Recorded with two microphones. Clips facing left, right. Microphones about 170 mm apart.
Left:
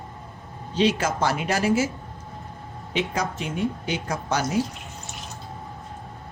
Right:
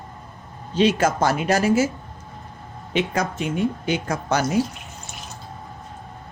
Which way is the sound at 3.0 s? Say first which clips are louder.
Right 3 dB; 55° right (ahead or behind).